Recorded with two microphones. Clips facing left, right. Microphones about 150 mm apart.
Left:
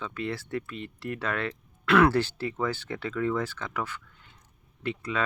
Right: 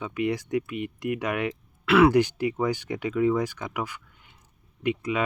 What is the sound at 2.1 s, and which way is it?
Speech, 15° right (ahead or behind).